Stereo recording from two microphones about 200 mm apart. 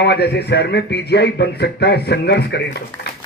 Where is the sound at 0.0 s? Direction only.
55° left (ahead or behind).